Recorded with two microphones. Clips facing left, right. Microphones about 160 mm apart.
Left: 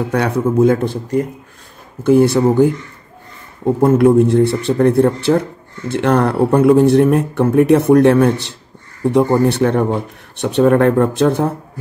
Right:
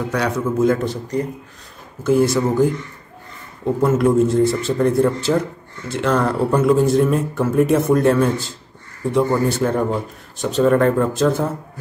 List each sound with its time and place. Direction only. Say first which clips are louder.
0.1 s speech: left 5 dB; 55° left (ahead or behind)
2.0 s speech: left 5 dB; 60° left (ahead or behind)
4.0 s speech: left 3 dB; 65° left (ahead or behind)